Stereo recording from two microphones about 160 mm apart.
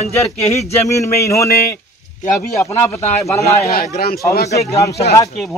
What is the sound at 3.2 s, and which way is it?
Speech, 15° left (ahead or behind).